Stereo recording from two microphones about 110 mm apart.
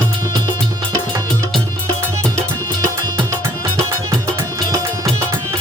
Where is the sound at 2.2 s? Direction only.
30° right (ahead or behind).